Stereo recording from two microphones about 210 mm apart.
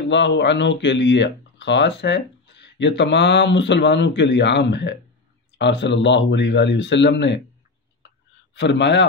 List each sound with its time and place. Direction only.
0.1 s speech: 60° left (ahead or behind)
8.5 s speech: 55° left (ahead or behind)